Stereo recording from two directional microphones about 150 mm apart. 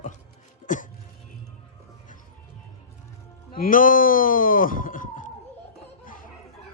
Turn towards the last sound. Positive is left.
turn(degrees=60)  # may be behind; listen again after turning